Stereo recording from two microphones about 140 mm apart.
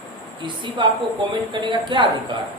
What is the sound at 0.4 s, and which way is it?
A woman's voice, 35° right (ahead or behind).